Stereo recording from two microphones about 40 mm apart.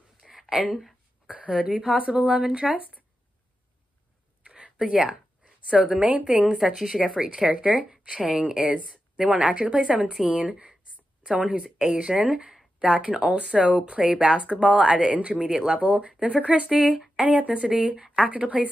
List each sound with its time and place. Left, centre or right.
0.2 s a sound: centre
1.3 s speech: right
2.4 s speech: centre
4.5 s a sound: right
4.7 s speech: centre
6.6 s speech: centre
7.0 s speech: centre
13.0 s speech: right
16.9 s speech: centre
18.3 s speech: right